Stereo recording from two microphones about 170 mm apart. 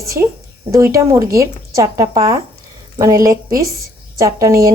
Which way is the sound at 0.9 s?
20° right (ahead or behind).